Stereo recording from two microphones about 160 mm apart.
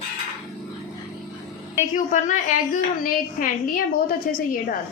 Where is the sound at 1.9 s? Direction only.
55° left (ahead or behind).